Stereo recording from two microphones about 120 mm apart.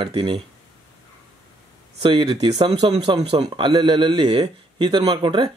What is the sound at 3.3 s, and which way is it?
Speech, 40° right (ahead or behind).